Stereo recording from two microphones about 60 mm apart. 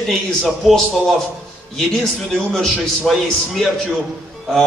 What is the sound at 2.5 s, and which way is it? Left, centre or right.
A man's voice, centre.